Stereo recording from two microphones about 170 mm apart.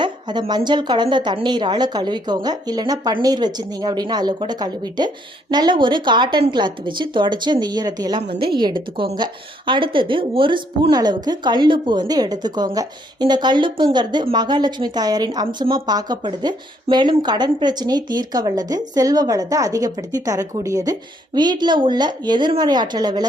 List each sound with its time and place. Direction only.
0.0 s a woman's voice: 25° right (ahead or behind)